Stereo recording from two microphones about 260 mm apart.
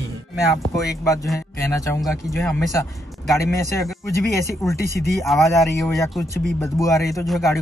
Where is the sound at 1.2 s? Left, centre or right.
Centre.